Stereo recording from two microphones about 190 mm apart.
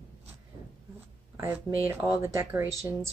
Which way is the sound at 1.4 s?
15° right (ahead or behind).